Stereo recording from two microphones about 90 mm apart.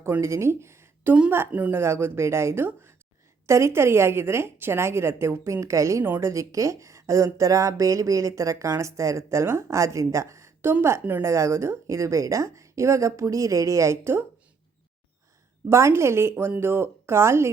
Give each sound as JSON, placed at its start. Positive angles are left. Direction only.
{"t": 0.0, "sound": "speech", "side_deg": -30}
{"t": 1.5, "sound": "speech", "side_deg": -15}
{"t": 1.8, "sound": "a woman's voice", "side_deg": -25}
{"t": 15.7, "sound": "a woman's voice", "side_deg": -30}